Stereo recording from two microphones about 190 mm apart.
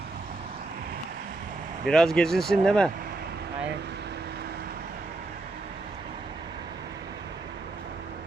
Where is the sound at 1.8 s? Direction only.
5° left (ahead or behind).